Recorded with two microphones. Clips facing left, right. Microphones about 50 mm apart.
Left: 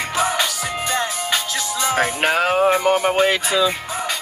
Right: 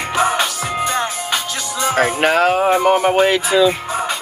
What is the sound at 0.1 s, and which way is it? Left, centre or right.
Music, right.